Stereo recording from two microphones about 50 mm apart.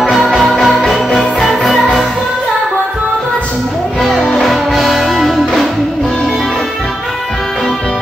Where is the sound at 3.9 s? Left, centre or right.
Centre.